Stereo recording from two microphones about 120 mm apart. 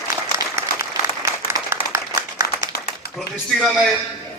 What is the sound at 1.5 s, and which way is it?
Applause, 20° right (ahead or behind).